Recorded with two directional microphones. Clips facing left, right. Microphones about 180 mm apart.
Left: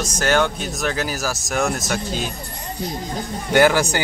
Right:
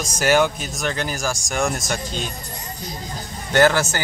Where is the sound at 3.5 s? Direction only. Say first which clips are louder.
Left 1 dB; 10° left (ahead or behind).